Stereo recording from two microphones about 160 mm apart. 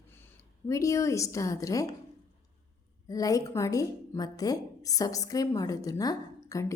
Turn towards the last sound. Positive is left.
turn(degrees=20)  # may be behind; listen again after turning